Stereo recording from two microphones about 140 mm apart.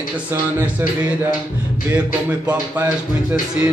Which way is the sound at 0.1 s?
10° right (ahead or behind).